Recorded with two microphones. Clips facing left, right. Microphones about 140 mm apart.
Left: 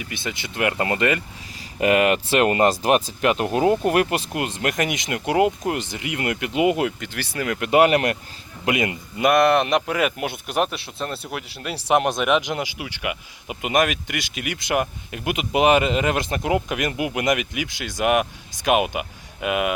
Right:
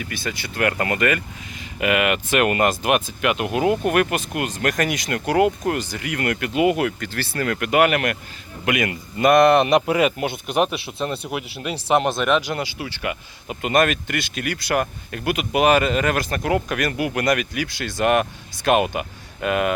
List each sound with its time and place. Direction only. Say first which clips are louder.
0.0 s speech: right 1 dB; 20° left (ahead or behind)
9.1 s speech: right 3 dB; 5° left (ahead or behind)
11.7 s speech: even; 10° left (ahead or behind)